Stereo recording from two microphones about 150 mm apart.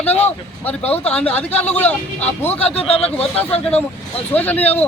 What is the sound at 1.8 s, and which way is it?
Speech, 10° left (ahead or behind).